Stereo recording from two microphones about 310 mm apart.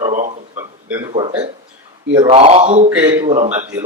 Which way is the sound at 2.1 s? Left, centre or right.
Centre.